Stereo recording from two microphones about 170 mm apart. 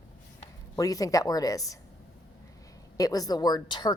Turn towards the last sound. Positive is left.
turn(degrees=25)  # may be behind; listen again after turning